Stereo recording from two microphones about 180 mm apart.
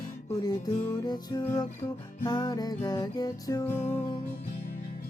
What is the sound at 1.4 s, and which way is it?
Music, 10° left (ahead or behind).